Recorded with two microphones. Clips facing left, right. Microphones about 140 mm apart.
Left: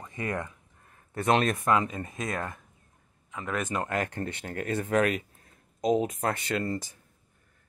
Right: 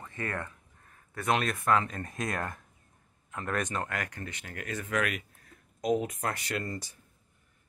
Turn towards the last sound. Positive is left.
turn(degrees=30)  # may be behind; listen again after turning